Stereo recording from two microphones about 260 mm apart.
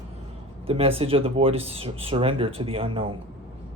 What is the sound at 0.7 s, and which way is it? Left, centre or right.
Speech, right.